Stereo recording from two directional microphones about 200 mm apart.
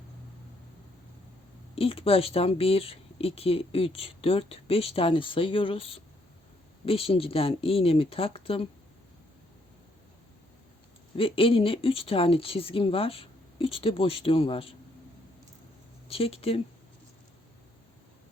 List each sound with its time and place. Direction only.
1.7 s speech: 30° left (ahead or behind)
11.2 s speech: 25° left (ahead or behind)
16.0 s speech: 30° left (ahead or behind)